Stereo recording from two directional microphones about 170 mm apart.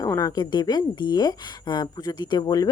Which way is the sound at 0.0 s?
20° left (ahead or behind).